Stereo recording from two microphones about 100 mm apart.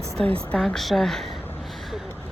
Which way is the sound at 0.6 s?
Centre (ahead or behind).